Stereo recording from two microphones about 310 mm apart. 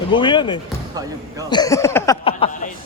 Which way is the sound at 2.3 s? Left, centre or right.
Left.